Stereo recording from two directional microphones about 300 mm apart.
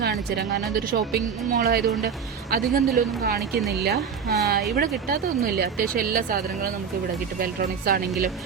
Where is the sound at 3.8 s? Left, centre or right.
Right.